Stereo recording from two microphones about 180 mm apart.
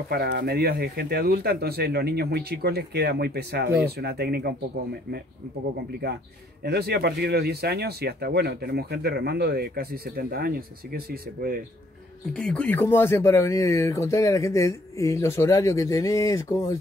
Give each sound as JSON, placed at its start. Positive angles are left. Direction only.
{"t": 0.1, "sound": "speech", "side_deg": -60}
{"t": 6.6, "sound": "speech", "side_deg": -65}
{"t": 12.4, "sound": "speech", "side_deg": 5}